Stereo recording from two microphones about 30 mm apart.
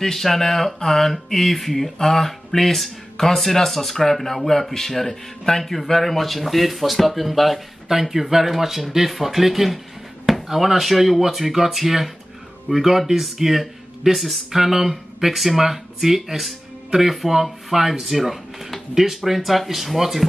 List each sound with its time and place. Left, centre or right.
0.0 s speech: centre